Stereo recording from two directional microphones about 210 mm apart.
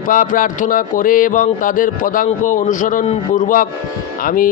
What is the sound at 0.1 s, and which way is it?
A man's voice, 40° left (ahead or behind).